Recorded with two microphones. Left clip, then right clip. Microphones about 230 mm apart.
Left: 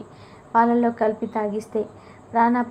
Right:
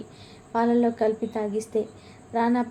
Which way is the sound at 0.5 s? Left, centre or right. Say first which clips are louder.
Left 4 dB; centre.